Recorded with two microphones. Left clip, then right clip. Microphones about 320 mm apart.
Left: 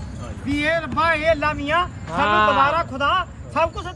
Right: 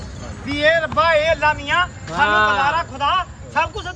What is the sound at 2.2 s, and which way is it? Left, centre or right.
Speech, centre.